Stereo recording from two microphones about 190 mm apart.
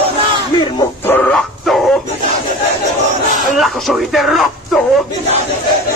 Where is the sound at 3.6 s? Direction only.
Centre (ahead or behind).